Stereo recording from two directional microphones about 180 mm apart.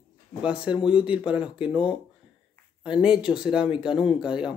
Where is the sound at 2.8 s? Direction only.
5° right (ahead or behind).